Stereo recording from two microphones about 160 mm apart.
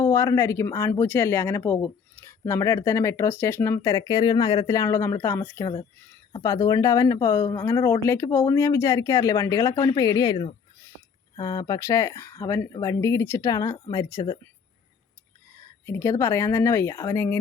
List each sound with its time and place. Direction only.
0.0 s speech: 15° left (ahead or behind)
15.9 s speech: 15° left (ahead or behind)